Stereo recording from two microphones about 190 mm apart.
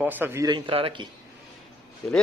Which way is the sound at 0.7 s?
30° right (ahead or behind).